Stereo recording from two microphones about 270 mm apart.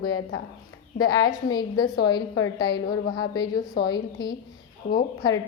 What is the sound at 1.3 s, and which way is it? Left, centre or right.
A woman's voice, centre.